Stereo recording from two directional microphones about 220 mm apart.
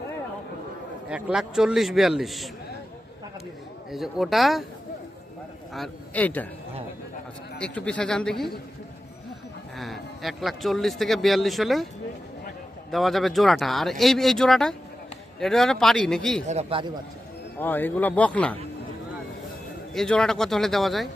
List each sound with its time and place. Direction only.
1.1 s speech: centre (ahead or behind)
3.9 s speech: centre (ahead or behind)
5.7 s a man's voice: 5° left (ahead or behind)
7.6 s speech: 5° left (ahead or behind)
9.7 s speech: centre (ahead or behind)
12.9 s speech: centre (ahead or behind)
16.5 s a man's voice: 25° right (ahead or behind)
17.6 s a man's voice: 10° left (ahead or behind)
19.9 s speech: 5° left (ahead or behind)